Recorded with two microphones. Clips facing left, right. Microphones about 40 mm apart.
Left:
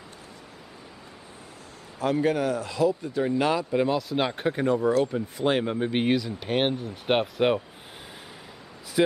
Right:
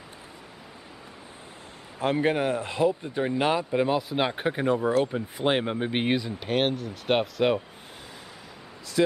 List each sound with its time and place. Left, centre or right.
2.0 s speech: right; by 6.3 s centre
6.4 s speech: centre
9.0 s speech: centre